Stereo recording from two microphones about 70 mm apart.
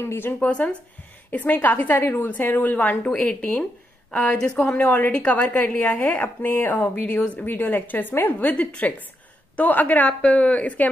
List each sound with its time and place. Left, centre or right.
0.0 s speech: left
0.5 s a woman's voice: centre
2.0 s a woman's voice: left; by 10.9 s centre